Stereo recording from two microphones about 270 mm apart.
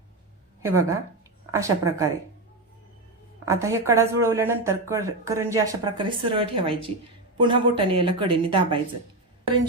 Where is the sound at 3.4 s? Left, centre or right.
Centre.